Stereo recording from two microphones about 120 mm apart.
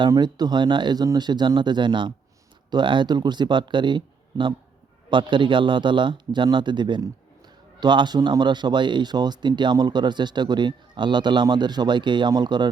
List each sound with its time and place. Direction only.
0.1 s speech: 35° right (ahead or behind)